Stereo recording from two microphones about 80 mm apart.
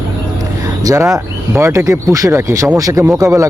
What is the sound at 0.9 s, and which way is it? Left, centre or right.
Speech, right.